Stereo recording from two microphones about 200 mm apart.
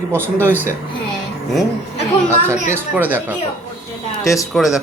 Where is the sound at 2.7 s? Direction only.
10° right (ahead or behind).